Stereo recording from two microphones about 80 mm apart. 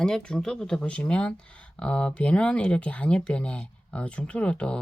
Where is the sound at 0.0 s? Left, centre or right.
Centre.